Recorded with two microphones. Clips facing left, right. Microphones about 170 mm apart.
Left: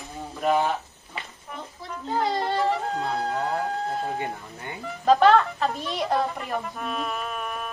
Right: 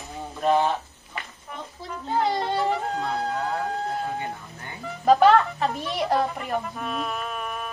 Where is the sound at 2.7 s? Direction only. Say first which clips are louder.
Even; centre (ahead or behind).